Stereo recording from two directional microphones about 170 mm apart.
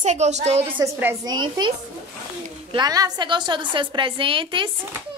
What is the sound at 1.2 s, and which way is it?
Speech, 25° right (ahead or behind).